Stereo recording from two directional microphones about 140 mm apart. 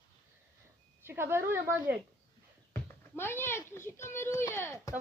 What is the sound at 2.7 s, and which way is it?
A child's voice, 15° left (ahead or behind).